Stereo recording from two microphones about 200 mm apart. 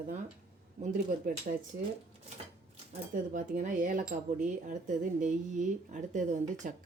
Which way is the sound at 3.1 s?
40° right (ahead or behind).